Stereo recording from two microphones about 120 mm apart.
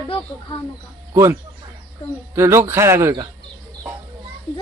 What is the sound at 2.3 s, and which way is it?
Speech, 25° right (ahead or behind).